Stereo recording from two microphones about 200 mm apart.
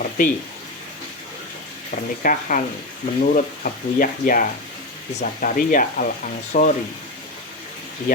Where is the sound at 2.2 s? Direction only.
40° left (ahead or behind).